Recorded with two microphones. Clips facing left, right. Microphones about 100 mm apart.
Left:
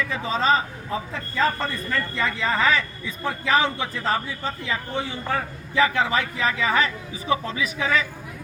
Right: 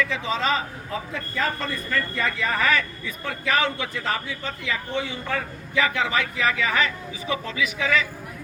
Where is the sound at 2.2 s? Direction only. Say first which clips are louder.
Left 3 dB; 25° left (ahead or behind).